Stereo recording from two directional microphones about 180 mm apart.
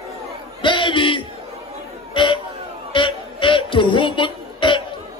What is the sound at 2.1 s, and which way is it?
Chatter, 25° left (ahead or behind).